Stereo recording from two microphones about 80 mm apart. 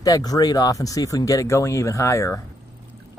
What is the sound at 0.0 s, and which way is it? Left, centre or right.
Speech, left.